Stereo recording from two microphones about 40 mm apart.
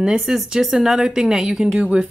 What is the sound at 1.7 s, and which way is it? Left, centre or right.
Speech, right.